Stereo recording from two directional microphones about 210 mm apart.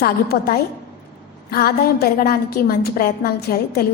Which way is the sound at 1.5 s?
45° left (ahead or behind).